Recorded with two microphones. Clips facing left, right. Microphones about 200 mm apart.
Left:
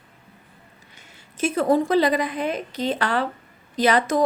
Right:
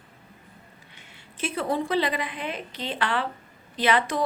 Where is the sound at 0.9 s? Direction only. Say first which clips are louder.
Left 8 dB; 45° left (ahead or behind).